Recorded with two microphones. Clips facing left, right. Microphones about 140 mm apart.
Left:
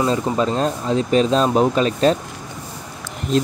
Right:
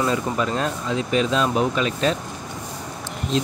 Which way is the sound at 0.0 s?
30° left (ahead or behind).